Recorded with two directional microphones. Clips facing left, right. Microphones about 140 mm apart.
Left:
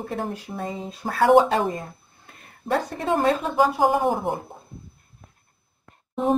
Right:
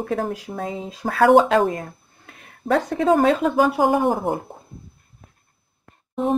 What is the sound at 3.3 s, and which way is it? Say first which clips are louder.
Speech: right 3 dB; 80° right.